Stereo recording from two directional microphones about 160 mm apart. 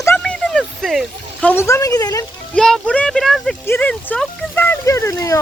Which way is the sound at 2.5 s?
5° left (ahead or behind).